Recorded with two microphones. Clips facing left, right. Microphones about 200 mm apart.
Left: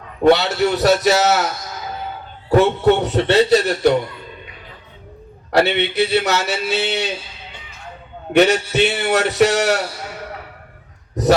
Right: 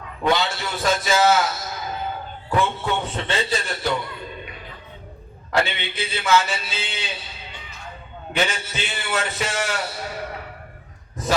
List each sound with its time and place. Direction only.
0.3 s speech: 70° left (ahead or behind)
2.9 s speech: 70° left (ahead or behind)
5.5 s speech: 70° left (ahead or behind)
8.3 s speech: 70° left (ahead or behind)
11.1 s a sound: 70° left (ahead or behind)